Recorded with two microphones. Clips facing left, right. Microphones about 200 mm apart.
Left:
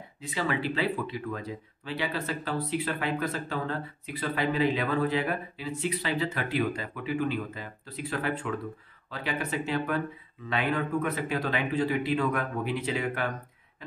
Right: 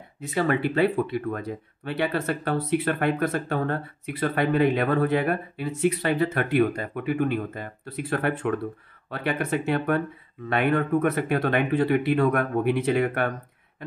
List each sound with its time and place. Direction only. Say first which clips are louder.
0.3 s speech: right 6 dB; 55° right (ahead or behind)